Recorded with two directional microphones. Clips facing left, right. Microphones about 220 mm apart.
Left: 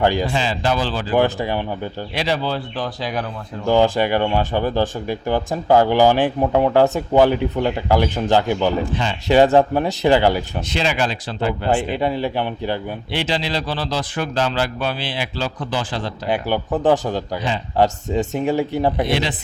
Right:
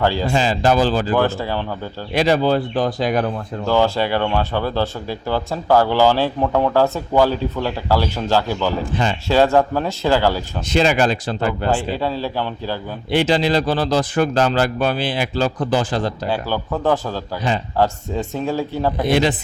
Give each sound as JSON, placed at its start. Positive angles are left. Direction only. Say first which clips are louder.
{"t": 0.0, "sound": "speech", "louder": "left 1 dB", "side_deg": 15}
{"t": 0.3, "sound": "speech", "louder": "right 4 dB", "side_deg": -45}
{"t": 1.1, "sound": "speech", "louder": "left 1 dB", "side_deg": 15}
{"t": 2.1, "sound": "speech", "louder": "right 7 dB", "side_deg": -45}
{"t": 3.7, "sound": "speech", "louder": "left 2 dB", "side_deg": 15}
{"t": 10.7, "sound": "speech", "louder": "right 6 dB", "side_deg": -45}
{"t": 11.7, "sound": "speech", "louder": "left 1 dB", "side_deg": 15}
{"t": 13.1, "sound": "speech", "louder": "right 7 dB", "side_deg": -45}
{"t": 16.3, "sound": "speech", "louder": "left 7 dB", "side_deg": 20}